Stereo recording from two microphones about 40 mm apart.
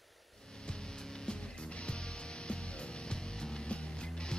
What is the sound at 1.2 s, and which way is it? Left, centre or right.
Music, left.